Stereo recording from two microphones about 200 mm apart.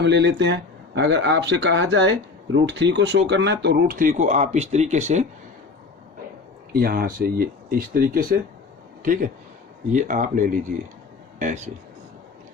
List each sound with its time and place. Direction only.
0.0 s speech: 60° right (ahead or behind); by 5.2 s 35° right (ahead or behind)
6.7 s speech: 50° right (ahead or behind)